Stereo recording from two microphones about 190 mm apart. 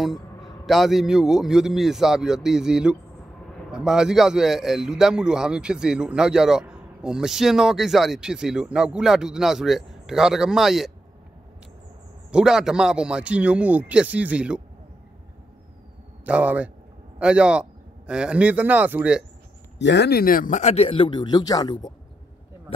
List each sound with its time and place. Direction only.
0.0 s a sound: centre (ahead or behind)
0.7 s a man's voice: centre (ahead or behind)
12.3 s a man's voice: 5° right (ahead or behind)
16.3 s a man's voice: 5° right (ahead or behind)
19.8 s a man's voice: 65° left (ahead or behind); by 21.9 s 20° left (ahead or behind)